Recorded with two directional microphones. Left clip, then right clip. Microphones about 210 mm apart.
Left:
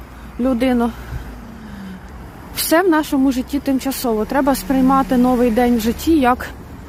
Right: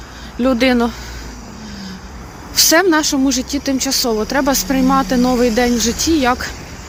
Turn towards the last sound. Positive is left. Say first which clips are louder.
# even
turn(degrees=20)  # may be behind; listen again after turning